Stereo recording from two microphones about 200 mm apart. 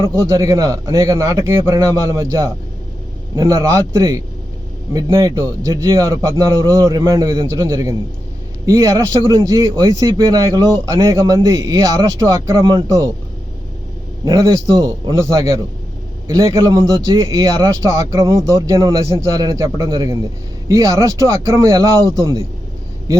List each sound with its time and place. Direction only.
0.0 s a man's voice: 15° right (ahead or behind)
14.3 s a man's voice: 20° right (ahead or behind)